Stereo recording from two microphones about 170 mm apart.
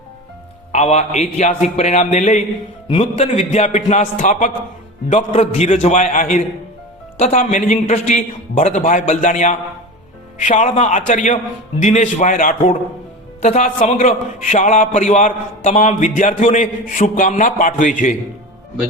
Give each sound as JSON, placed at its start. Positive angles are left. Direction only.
{"t": 0.7, "sound": "a man's voice", "side_deg": 40}
{"t": 13.4, "sound": "a man's voice", "side_deg": 40}